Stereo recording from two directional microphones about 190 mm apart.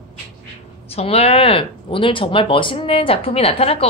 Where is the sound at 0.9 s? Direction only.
30° left (ahead or behind).